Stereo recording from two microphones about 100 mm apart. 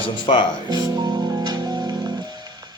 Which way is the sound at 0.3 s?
55° left (ahead or behind).